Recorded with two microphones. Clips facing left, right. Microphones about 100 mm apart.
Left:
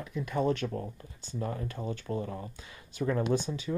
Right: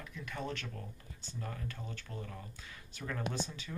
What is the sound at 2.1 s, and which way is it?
Speech, 55° left (ahead or behind).